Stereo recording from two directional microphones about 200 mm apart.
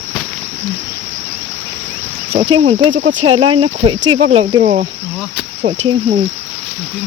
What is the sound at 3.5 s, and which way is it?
Speech, 25° right (ahead or behind).